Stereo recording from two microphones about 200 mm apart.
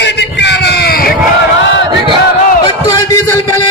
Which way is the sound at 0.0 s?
60° left (ahead or behind).